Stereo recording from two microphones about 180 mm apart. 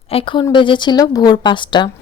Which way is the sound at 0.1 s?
30° left (ahead or behind).